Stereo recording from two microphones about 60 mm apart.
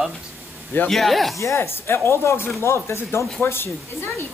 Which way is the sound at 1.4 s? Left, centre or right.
Left.